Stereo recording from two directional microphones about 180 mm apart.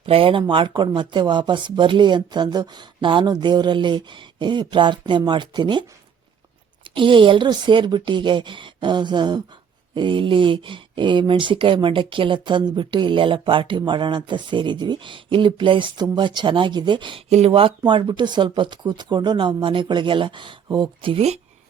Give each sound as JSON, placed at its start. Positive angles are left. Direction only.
{"t": 0.0, "sound": "speech", "side_deg": -30}
{"t": 6.9, "sound": "speech", "side_deg": -30}